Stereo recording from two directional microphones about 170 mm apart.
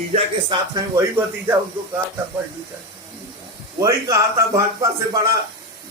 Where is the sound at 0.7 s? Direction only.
15° right (ahead or behind).